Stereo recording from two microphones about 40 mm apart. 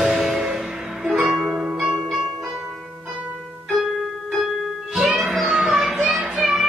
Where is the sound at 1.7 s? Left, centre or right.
Centre.